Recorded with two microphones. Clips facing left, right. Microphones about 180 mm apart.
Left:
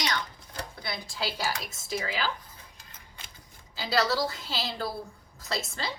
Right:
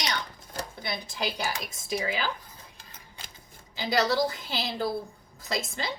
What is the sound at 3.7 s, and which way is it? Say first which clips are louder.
A woman's voice: right 2 dB; 20° right (ahead or behind).